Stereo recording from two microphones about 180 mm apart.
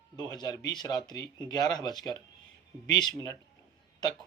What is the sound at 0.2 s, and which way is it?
Speech, 20° left (ahead or behind).